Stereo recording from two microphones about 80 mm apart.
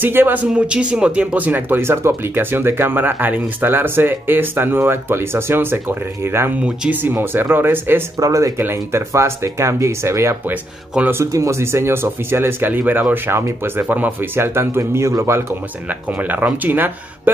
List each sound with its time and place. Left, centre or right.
0.0 s speech: right
0.5 s speech: centre; by 6.5 s right
6.6 s speech: centre
7.0 s speech: right
8.2 s speech: right
8.5 s speech: right
10.5 s speech: centre
11.1 s speech: right
15.9 s speech: right